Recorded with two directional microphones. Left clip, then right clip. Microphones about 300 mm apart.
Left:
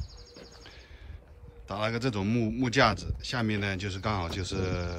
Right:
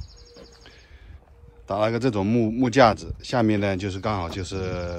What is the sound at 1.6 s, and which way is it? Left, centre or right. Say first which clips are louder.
Speech: right 8 dB; centre.